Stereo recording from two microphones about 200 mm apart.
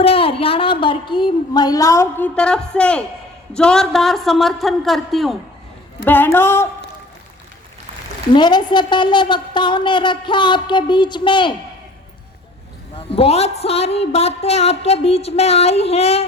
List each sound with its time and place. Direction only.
0.0 s a woman's voice: 30° left (ahead or behind); by 5.4 s centre (ahead or behind)
6.1 s a woman's voice: 10° left (ahead or behind)
8.3 s a woman's voice: 20° left (ahead or behind)
13.0 s a woman's voice: 30° left (ahead or behind)